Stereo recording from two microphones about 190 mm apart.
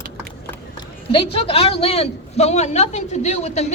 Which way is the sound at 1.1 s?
30° left (ahead or behind).